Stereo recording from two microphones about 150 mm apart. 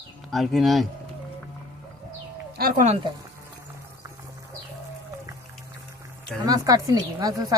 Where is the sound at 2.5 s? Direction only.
75° right (ahead or behind).